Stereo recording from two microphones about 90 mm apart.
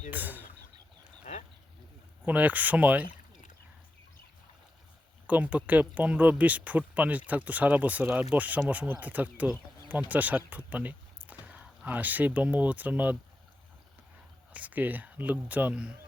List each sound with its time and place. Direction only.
0.1 s speech: 20° right (ahead or behind)
2.2 s speech: 15° right (ahead or behind)
5.2 s speech: 15° right (ahead or behind)
14.5 s speech: 15° right (ahead or behind)